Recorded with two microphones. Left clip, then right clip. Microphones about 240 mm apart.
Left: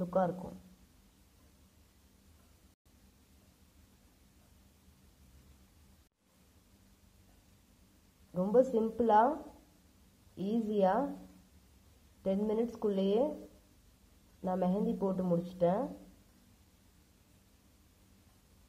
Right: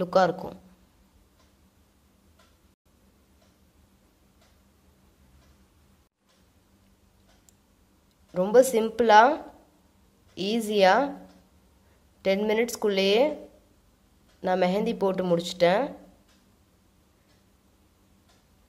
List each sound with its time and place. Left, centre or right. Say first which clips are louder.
0.0 s speech: right 10 dB; right
8.3 s a woman's voice: right 9 dB; right
10.3 s a woman's voice: right 8 dB; right
12.2 s a woman's voice: right 9 dB; right
14.4 s a woman's voice: right 10 dB; right